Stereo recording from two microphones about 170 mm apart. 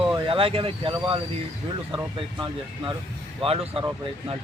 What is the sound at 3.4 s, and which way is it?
Speech, 30° right (ahead or behind).